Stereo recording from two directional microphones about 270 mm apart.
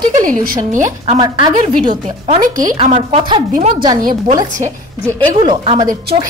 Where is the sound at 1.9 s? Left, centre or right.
Right.